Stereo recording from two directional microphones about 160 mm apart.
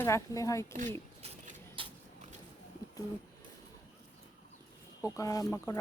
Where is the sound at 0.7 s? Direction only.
50° right (ahead or behind).